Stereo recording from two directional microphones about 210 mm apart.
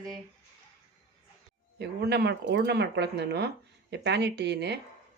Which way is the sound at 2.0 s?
50° right (ahead or behind).